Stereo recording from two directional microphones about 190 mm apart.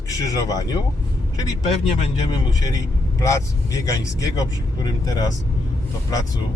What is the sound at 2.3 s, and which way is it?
Speech, 20° left (ahead or behind).